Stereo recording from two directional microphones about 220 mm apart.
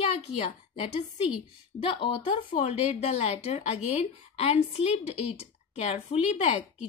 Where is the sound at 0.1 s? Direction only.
30° left (ahead or behind).